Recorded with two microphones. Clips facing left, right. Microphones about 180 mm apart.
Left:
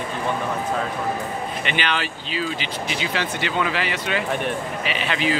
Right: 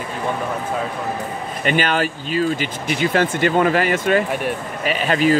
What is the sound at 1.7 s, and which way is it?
Speech, 45° right (ahead or behind).